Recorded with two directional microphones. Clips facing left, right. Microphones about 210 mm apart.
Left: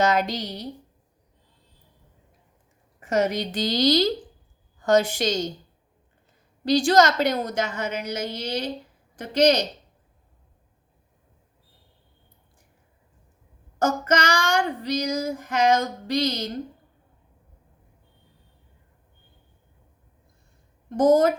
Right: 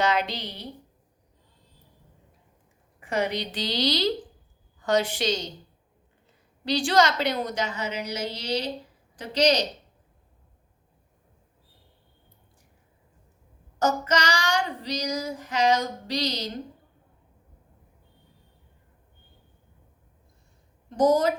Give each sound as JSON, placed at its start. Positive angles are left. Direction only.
{"t": 0.0, "sound": "child singing", "side_deg": 45}
{"t": 3.0, "sound": "child singing", "side_deg": 45}
{"t": 6.7, "sound": "child singing", "side_deg": 45}
{"t": 13.7, "sound": "child singing", "side_deg": 50}
{"t": 20.9, "sound": "child singing", "side_deg": 50}